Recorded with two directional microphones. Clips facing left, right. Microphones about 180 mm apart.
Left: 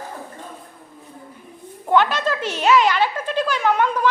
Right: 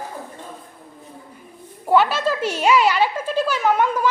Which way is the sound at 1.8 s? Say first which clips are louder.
Right 1 dB; 5° right (ahead or behind).